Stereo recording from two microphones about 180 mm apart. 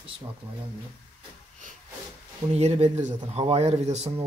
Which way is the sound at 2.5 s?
35° right (ahead or behind).